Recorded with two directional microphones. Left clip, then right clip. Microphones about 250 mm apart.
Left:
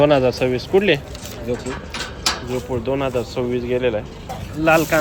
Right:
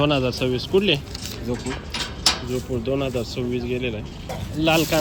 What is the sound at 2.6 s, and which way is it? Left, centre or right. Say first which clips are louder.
Speech: left 3 dB; centre.